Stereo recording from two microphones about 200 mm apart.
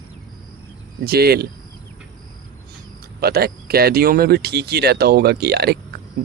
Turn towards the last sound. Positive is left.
turn(degrees=-55)  # may be behind; listen again after turning